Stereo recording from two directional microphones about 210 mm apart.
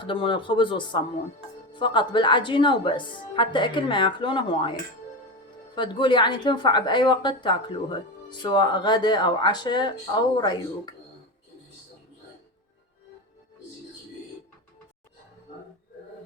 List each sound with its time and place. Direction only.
0.0 s a woman's voice: 25° left (ahead or behind)
5.7 s a woman's voice: 20° left (ahead or behind)